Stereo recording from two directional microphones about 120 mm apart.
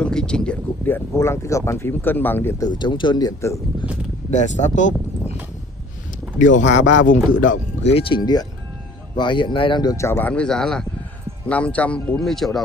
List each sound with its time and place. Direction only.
0.0 s speech: 5° left (ahead or behind)
2.8 s speech: 40° left (ahead or behind)
4.3 s speech: 80° left
6.3 s speech: 90° left
8.0 s speech: 40° left (ahead or behind); by 12.4 s centre (ahead or behind)